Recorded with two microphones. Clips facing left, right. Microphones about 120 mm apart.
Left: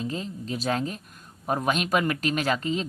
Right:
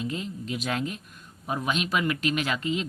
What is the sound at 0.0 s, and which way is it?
Speech, 35° left (ahead or behind).